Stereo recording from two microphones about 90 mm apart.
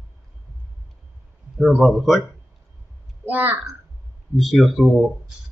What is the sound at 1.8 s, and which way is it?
Speech, centre (ahead or behind).